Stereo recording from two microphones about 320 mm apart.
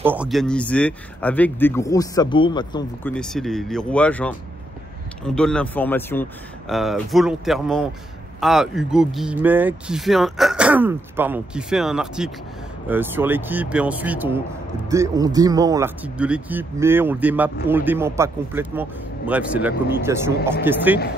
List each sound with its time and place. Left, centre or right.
0.0 s speech: centre